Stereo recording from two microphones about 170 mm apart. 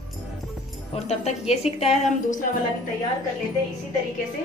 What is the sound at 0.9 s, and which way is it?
A woman's voice, 40° left (ahead or behind).